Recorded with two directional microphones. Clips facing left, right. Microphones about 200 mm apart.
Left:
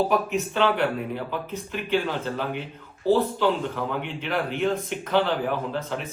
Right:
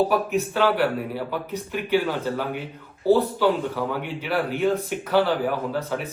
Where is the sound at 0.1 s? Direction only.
5° right (ahead or behind).